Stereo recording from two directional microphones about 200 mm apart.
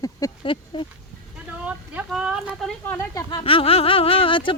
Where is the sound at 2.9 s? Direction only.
15° left (ahead or behind).